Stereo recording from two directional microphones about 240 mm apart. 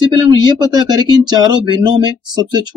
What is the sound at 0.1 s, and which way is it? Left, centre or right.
Speech, centre.